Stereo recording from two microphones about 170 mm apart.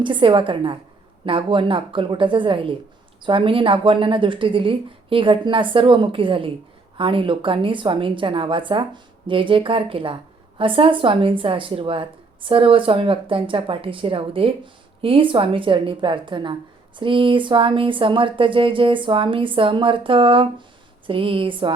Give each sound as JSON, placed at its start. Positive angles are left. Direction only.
{"t": 0.0, "sound": "speech", "side_deg": -30}